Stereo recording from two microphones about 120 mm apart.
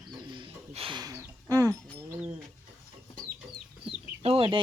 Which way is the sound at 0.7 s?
50° right (ahead or behind).